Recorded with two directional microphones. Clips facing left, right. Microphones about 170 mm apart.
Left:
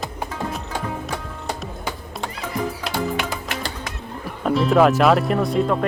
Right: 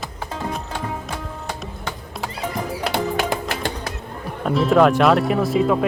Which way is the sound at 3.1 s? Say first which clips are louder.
Right 3 dB; 45° right (ahead or behind).